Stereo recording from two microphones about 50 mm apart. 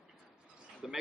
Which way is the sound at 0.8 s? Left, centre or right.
Centre.